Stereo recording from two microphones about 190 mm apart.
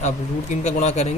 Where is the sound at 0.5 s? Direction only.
35° left (ahead or behind).